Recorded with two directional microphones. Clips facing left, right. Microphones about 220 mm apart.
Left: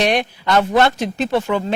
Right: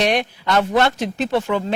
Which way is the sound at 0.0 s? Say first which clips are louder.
Left 1 dB; 10° left (ahead or behind).